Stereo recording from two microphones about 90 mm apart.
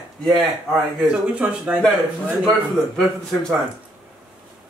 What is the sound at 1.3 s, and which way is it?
Speech, 10° right (ahead or behind).